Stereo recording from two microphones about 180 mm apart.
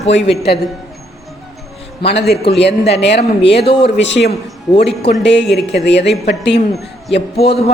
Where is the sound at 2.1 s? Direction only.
65° left (ahead or behind).